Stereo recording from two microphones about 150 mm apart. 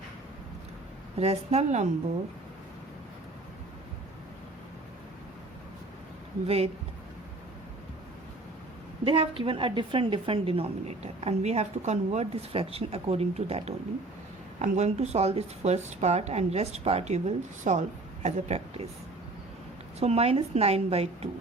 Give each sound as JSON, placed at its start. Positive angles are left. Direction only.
{"t": 1.2, "sound": "speech", "side_deg": -40}
{"t": 9.0, "sound": "a woman's voice", "side_deg": -35}
{"t": 20.0, "sound": "speech", "side_deg": -45}